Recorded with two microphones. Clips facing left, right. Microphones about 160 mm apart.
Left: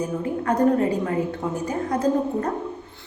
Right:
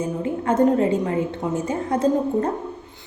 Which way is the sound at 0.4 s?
25° right (ahead or behind).